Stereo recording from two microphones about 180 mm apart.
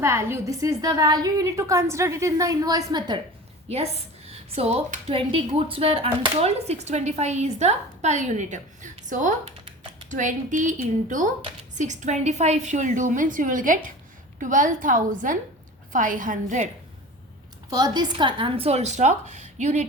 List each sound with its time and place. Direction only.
0.0 s a woman's voice: 15° right (ahead or behind)
3.7 s a woman's voice: 35° right (ahead or behind)
17.7 s a woman's voice: 20° right (ahead or behind); by 19.9 s 40° right (ahead or behind)